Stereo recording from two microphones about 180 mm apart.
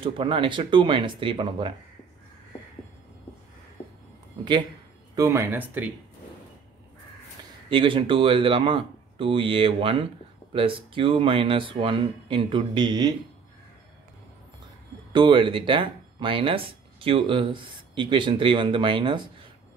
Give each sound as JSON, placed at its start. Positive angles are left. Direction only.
{"t": 0.0, "sound": "speech", "side_deg": -30}
{"t": 5.1, "sound": "speech", "side_deg": -15}
{"t": 7.7, "sound": "speech", "side_deg": -30}
{"t": 15.1, "sound": "speech", "side_deg": -25}